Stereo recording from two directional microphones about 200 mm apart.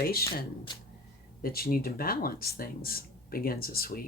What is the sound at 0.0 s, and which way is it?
Speech, 50° left (ahead or behind).